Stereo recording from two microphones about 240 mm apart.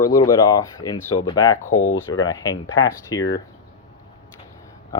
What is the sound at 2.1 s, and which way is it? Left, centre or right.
Speech, centre.